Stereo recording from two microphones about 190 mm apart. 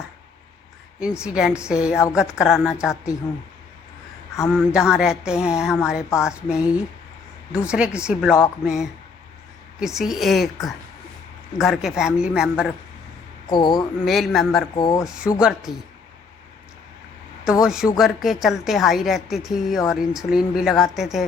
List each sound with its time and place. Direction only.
0.9 s a woman's voice: 5° right (ahead or behind)
4.4 s a woman's voice: 5° left (ahead or behind)
6.0 s speech: 15° left (ahead or behind)
6.2 s a woman's voice: 5° right (ahead or behind)
13.5 s speech: 25° left (ahead or behind)
13.7 s a woman's voice: centre (ahead or behind)
14.8 s speech: 20° left (ahead or behind)
15.0 s a woman's voice: 5° right (ahead or behind)
17.4 s a woman's voice: 5° right (ahead or behind)